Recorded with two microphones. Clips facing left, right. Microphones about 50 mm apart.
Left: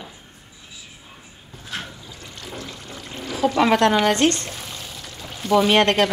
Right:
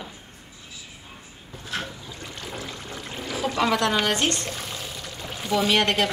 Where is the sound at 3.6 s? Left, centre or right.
Left.